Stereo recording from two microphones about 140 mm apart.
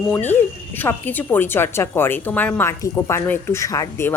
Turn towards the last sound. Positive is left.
turn(degrees=20)  # may be behind; listen again after turning